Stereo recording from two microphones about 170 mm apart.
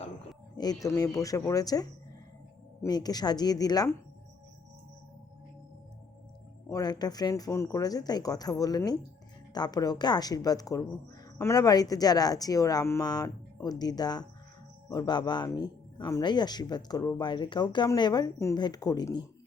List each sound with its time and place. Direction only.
0.5 s speech: 25° left (ahead or behind)
6.7 s speech: 20° left (ahead or behind)